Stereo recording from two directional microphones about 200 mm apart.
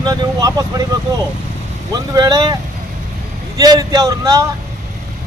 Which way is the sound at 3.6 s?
20° right (ahead or behind).